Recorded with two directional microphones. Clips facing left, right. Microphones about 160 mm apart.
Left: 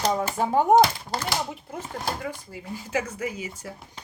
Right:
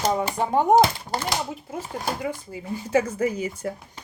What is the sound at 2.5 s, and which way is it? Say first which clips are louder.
Speech: right 6 dB; 25° right (ahead or behind).